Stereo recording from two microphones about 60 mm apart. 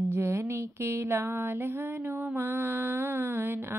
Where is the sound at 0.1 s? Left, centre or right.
Right.